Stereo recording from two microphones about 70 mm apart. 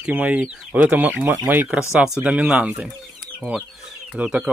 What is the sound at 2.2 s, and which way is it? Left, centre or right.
Speech, centre.